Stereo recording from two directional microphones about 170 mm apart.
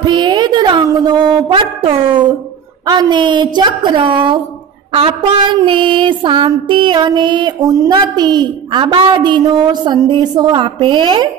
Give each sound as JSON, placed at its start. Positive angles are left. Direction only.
{"t": 0.0, "sound": "a woman's voice", "side_deg": -25}
{"t": 2.8, "sound": "music", "side_deg": -25}